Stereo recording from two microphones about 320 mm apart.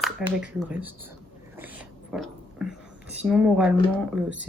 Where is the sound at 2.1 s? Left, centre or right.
Centre.